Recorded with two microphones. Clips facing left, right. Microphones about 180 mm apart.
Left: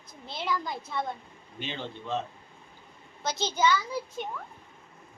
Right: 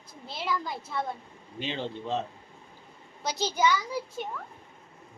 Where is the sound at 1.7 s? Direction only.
30° right (ahead or behind).